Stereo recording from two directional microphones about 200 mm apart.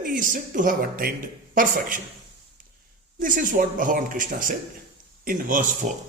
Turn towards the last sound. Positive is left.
turn(degrees=-40)  # may be behind; listen again after turning